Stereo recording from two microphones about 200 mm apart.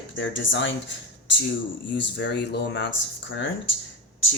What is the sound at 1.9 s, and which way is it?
Speech, 60° left (ahead or behind).